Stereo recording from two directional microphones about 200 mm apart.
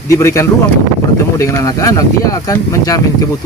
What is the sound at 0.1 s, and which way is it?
Speech, 15° left (ahead or behind).